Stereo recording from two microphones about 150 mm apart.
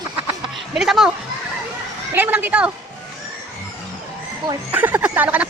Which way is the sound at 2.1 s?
10° right (ahead or behind).